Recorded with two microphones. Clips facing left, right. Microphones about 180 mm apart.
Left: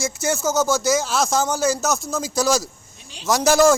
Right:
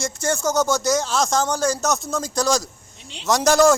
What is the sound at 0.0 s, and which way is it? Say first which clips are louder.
A man's voice: even; 5° left (ahead or behind).